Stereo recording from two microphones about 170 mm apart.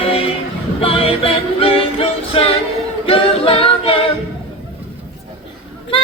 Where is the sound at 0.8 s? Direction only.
35° left (ahead or behind).